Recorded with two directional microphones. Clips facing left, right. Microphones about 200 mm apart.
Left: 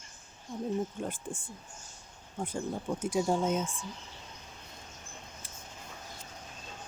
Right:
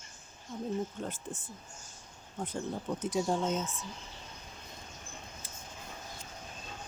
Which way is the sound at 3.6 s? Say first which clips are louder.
Left 2 dB; 30° left (ahead or behind).